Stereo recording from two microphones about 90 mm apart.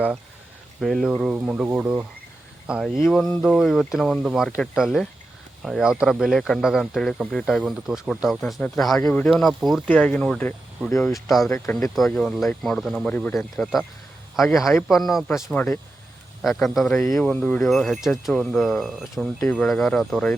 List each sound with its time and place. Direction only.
0.8 s speech: centre (ahead or behind); by 2.0 s 15° right (ahead or behind)
2.8 s speech: centre (ahead or behind)
7.6 s speech: 5° right (ahead or behind)
9.1 s speech: 15° left (ahead or behind)
9.4 s speech: centre (ahead or behind)
9.8 s speech: 15° left (ahead or behind)
11.0 s speech: centre (ahead or behind)
11.4 s speech: 30° left (ahead or behind)
11.7 s speech: 5° left (ahead or behind)
13.1 s speech: 15° left (ahead or behind)
13.6 s speech: centre (ahead or behind)
17.6 s speech: centre (ahead or behind)